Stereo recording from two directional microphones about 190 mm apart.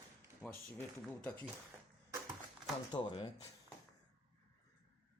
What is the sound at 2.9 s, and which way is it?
Speech, 25° left (ahead or behind).